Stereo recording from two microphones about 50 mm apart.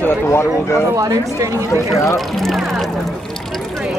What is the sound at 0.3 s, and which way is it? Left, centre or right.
Speech, left.